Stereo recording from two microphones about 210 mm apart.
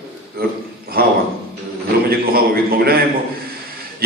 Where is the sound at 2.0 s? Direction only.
45° right (ahead or behind).